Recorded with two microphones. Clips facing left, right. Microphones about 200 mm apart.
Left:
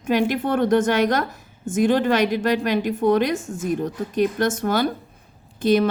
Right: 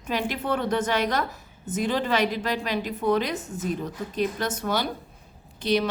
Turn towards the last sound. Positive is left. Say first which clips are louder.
# left 6 dB
turn(degrees=50)  # may be behind; listen again after turning